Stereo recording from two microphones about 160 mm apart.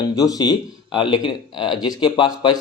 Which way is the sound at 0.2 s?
25° left (ahead or behind).